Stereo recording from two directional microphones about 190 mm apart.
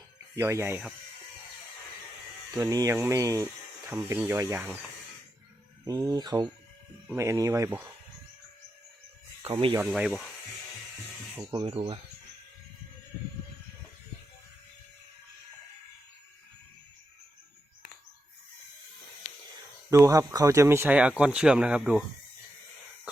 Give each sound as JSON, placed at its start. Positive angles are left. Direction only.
{"t": 0.3, "sound": "speech", "side_deg": -15}
{"t": 2.6, "sound": "speech", "side_deg": -20}
{"t": 5.8, "sound": "speech", "side_deg": -20}
{"t": 9.4, "sound": "speech", "side_deg": -30}
{"t": 9.8, "sound": "speech", "side_deg": -5}
{"t": 11.5, "sound": "speech", "side_deg": -25}
{"t": 19.9, "sound": "speech", "side_deg": -15}